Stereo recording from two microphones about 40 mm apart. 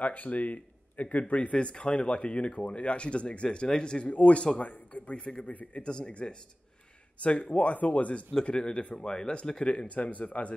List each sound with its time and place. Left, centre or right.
0.0 s speech: left
3.4 s speech: centre
4.1 s speech: left
5.5 s speech: left
5.9 s speech: left
8.5 s speech: left